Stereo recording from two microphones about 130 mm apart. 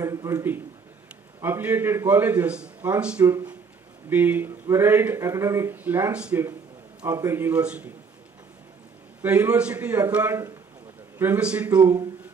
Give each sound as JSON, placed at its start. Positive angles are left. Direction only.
{"t": 0.0, "sound": "a man's voice", "side_deg": -25}
{"t": 7.0, "sound": "speech", "side_deg": -25}
{"t": 9.2, "sound": "speech", "side_deg": -10}